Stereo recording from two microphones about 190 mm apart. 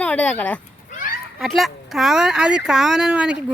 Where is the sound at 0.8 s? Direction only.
45° left (ahead or behind).